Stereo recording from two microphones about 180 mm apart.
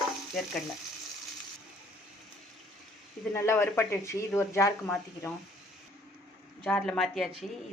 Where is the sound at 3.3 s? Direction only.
15° left (ahead or behind).